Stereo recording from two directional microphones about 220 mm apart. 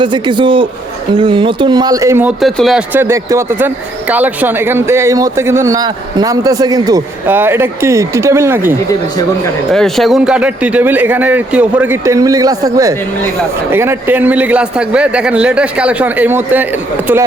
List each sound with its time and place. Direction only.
0.0 s a man's voice: 20° right (ahead or behind)
9.7 s speech: centre (ahead or behind)